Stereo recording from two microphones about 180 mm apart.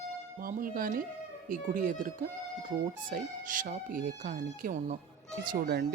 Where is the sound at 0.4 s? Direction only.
50° right (ahead or behind).